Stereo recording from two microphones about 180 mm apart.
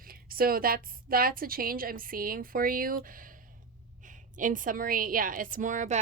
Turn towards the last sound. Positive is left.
turn(degrees=-45)  # may be behind; listen again after turning